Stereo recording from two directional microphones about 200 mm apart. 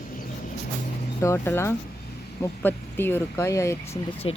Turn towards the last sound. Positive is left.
turn(degrees=25)  # may be behind; listen again after turning